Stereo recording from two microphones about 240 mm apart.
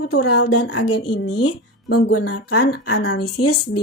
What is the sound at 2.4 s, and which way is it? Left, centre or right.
Music, left.